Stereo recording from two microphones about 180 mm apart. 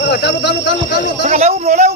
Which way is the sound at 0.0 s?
65° left (ahead or behind).